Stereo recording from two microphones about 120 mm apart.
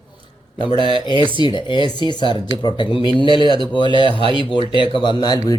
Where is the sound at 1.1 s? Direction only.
45° right (ahead or behind).